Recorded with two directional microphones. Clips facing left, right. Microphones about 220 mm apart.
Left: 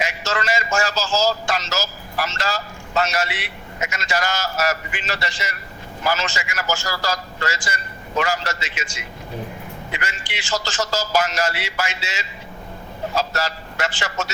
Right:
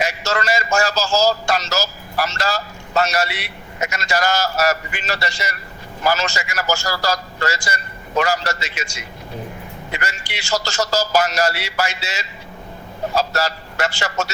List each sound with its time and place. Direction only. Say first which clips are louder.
0.0 s a man's voice: right 3 dB; 40° right (ahead or behind)